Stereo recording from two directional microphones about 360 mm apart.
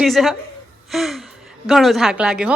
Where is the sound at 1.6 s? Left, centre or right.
Centre.